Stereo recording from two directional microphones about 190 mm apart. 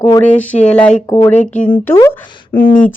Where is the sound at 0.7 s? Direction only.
5° left (ahead or behind).